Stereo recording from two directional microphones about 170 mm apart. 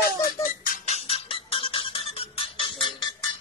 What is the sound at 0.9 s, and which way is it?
Music, 35° left (ahead or behind).